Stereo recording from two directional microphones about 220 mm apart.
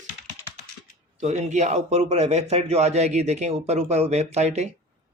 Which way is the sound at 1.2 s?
30° right (ahead or behind).